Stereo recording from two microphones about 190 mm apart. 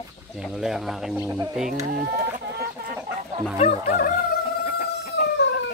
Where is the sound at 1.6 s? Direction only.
50° right (ahead or behind).